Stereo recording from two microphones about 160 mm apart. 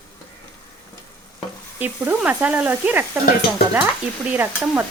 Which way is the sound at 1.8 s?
10° right (ahead or behind).